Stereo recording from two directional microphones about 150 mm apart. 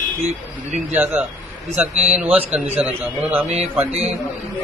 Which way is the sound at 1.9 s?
45° right (ahead or behind).